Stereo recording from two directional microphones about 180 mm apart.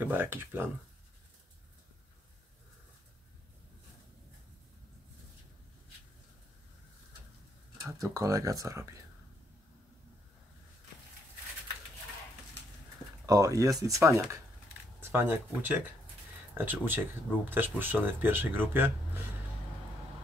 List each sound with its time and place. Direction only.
0.0 s speech: 10° right (ahead or behind)
8.0 s speech: 15° right (ahead or behind)
13.2 s speech: 20° right (ahead or behind)